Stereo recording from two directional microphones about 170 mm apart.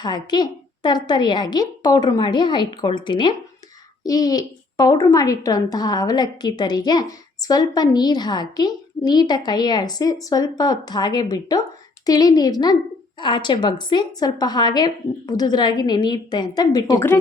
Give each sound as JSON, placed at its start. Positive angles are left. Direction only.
{"t": 0.0, "sound": "a child's voice", "side_deg": 25}